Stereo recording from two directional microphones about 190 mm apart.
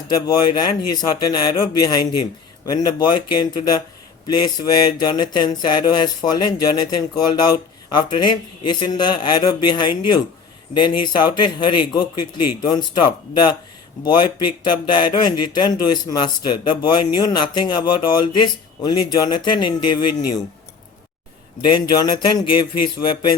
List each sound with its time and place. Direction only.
0.1 s speech: 20° left (ahead or behind)
21.7 s speech: 25° left (ahead or behind)